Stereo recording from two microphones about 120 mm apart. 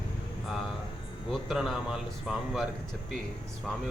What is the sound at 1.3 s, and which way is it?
A man's voice, centre (ahead or behind).